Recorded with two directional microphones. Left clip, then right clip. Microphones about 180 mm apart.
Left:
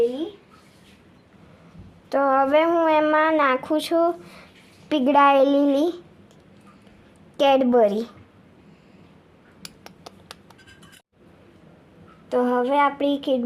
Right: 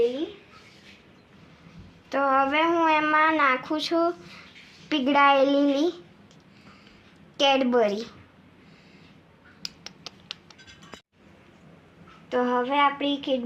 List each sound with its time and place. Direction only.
2.0 s speech: 75° left (ahead or behind)
7.3 s speech: 70° left (ahead or behind)
12.3 s child singing: 85° left